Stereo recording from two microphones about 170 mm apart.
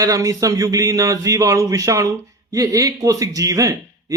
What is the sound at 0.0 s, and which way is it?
Speech, 20° right (ahead or behind).